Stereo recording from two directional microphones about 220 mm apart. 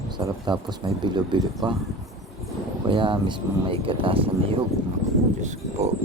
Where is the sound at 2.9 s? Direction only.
20° right (ahead or behind).